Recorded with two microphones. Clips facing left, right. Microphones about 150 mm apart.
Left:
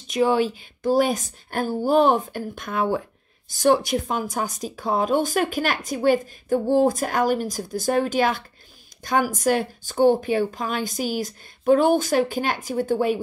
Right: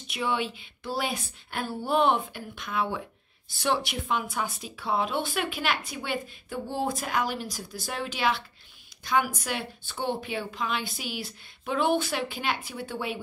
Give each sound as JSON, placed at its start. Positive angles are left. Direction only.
{"t": 0.1, "sound": "speech", "side_deg": 40}